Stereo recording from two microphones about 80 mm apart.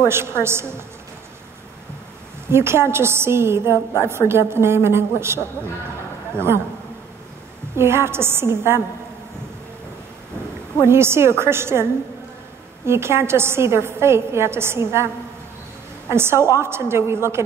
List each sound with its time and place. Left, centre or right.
0.1 s a woman's voice: right
2.4 s a woman's voice: right
7.7 s a woman's voice: right
10.8 s a woman's voice: right
16.1 s a woman's voice: right